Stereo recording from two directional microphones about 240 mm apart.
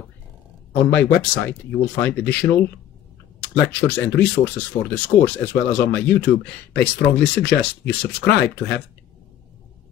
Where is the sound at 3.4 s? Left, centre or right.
Left.